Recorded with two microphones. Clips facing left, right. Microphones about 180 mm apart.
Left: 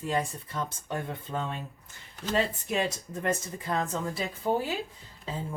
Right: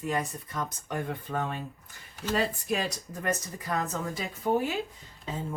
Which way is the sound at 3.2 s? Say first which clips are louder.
Left 1 dB; 25° left (ahead or behind).